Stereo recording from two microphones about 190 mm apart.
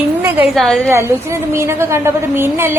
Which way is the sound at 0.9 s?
15° right (ahead or behind).